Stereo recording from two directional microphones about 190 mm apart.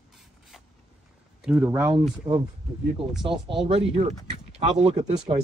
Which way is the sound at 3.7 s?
35° right (ahead or behind).